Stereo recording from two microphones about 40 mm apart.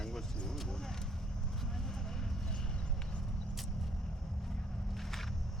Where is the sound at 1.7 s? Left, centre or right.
Centre.